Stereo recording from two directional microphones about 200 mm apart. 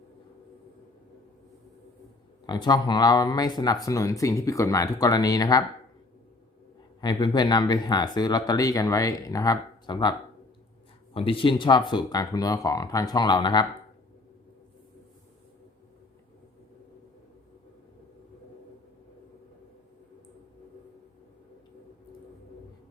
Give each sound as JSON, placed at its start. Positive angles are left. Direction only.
{"t": 2.5, "sound": "speech", "side_deg": 20}
{"t": 7.0, "sound": "speech", "side_deg": 20}